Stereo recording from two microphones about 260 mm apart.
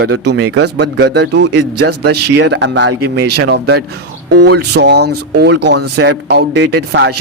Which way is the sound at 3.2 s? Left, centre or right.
Right.